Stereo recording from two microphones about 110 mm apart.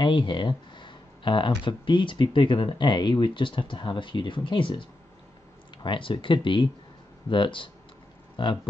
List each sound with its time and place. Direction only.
0.0 s speech: 45° left (ahead or behind)